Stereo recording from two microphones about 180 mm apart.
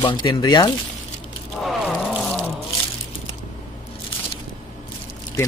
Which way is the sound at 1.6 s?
Centre (ahead or behind).